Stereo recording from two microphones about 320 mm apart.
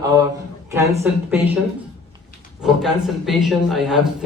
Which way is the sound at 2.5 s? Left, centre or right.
Centre.